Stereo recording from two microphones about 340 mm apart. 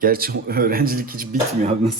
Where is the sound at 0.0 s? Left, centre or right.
Right.